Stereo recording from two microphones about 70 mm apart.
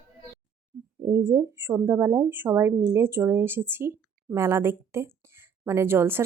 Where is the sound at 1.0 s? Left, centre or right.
Right.